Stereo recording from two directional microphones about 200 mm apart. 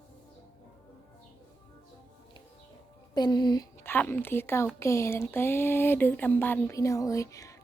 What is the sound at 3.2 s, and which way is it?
A woman's voice, 20° left (ahead or behind).